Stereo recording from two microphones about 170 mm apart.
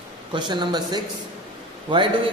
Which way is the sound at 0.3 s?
25° right (ahead or behind).